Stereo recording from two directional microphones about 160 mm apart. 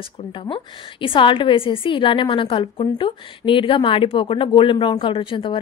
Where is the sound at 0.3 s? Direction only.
30° left (ahead or behind).